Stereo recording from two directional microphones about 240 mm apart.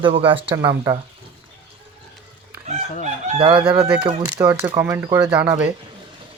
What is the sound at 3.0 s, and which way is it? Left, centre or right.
Speech, right.